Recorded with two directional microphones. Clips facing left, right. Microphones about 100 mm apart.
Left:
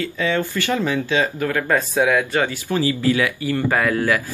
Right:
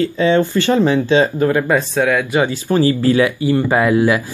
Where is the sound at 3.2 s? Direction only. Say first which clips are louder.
Right 6 dB; 20° right (ahead or behind).